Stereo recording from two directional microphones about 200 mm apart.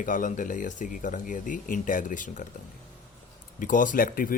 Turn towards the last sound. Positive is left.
turn(degrees=45)  # may be behind; listen again after turning